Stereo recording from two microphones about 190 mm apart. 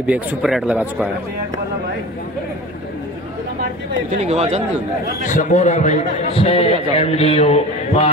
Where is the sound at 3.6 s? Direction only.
40° right (ahead or behind).